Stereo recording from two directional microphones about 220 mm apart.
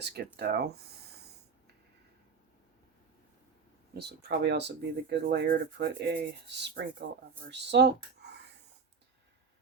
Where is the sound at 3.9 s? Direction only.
50° right (ahead or behind).